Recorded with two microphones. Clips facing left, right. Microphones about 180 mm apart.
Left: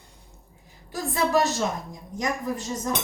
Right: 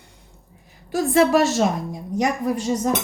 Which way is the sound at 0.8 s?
80° right.